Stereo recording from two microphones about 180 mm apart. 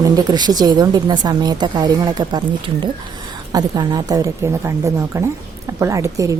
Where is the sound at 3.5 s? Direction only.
25° right (ahead or behind).